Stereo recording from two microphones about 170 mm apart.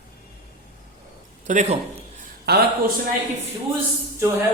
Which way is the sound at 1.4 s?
45° right (ahead or behind).